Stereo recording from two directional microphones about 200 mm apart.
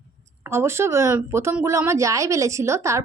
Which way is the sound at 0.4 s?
15° right (ahead or behind).